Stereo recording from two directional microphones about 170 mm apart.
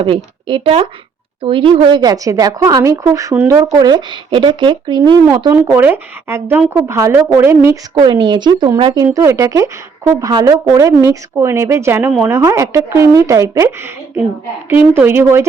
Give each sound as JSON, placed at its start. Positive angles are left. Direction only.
{"t": 0.0, "sound": "a woman's voice", "side_deg": -30}
{"t": 7.9, "sound": "a woman's voice", "side_deg": -25}